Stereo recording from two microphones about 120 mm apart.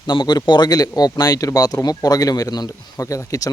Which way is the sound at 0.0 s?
40° left (ahead or behind).